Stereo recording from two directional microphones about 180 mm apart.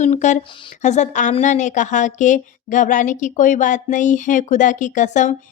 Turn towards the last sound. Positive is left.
turn(degrees=45)  # may be behind; listen again after turning